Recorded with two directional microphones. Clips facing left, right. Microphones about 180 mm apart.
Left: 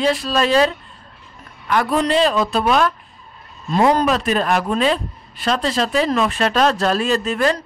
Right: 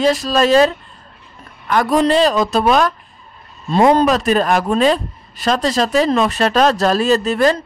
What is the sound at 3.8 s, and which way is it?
Speech, 30° right (ahead or behind).